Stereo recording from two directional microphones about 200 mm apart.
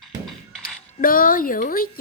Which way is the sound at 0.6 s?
45° left (ahead or behind).